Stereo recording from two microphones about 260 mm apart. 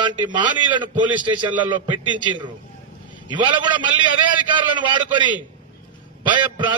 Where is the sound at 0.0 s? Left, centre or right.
Centre.